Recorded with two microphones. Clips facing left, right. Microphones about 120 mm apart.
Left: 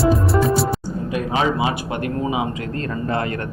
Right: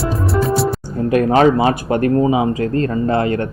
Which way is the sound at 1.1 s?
50° right (ahead or behind).